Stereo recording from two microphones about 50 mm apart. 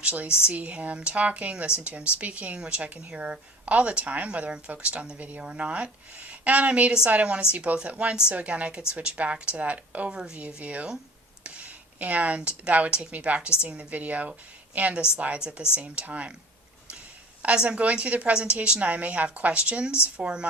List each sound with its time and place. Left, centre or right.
0.0 s a woman's voice: right
10.1 s speech: centre
10.3 s a woman's voice: right
17.4 s a woman's voice: right